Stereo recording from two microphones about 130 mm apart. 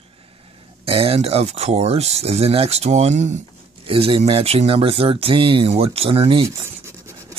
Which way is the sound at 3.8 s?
45° right (ahead or behind).